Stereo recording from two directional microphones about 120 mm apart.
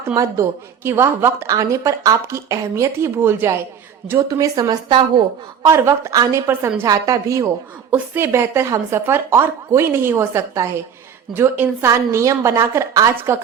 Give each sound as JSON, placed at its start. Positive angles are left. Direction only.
{"t": 0.0, "sound": "a woman's voice", "side_deg": -25}
{"t": 5.6, "sound": "a woman's voice", "side_deg": -25}
{"t": 6.8, "sound": "a woman's voice", "side_deg": -30}